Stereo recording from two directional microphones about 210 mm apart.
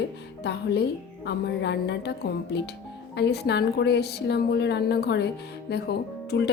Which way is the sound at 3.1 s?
50° left (ahead or behind).